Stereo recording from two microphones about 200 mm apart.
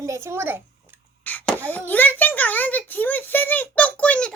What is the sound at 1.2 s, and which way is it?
Cough, 10° left (ahead or behind).